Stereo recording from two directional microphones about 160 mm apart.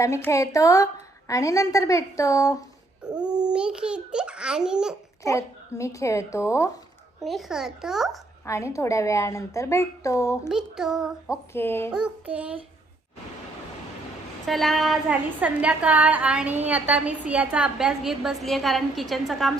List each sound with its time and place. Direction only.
0.0 s a woman's voice: 20° left (ahead or behind)
3.0 s babbling: 5° right (ahead or behind)
3.5 s a child's voice: 5° right (ahead or behind)
5.2 s a woman's voice: 20° left (ahead or behind)
7.2 s a child's voice: centre (ahead or behind)
8.4 s a woman's voice: 20° left (ahead or behind)
10.5 s a child's voice: 5° right (ahead or behind)
11.5 s speech: 15° left (ahead or behind)
11.9 s a woman's voice: 5° right (ahead or behind)
14.4 s a child's voice: centre (ahead or behind)